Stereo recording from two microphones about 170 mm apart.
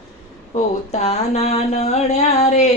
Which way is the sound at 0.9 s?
40° left (ahead or behind).